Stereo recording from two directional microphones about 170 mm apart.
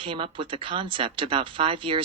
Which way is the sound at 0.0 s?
30° right (ahead or behind).